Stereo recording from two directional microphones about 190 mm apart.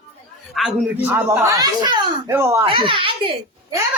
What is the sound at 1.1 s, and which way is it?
Speech, 15° right (ahead or behind).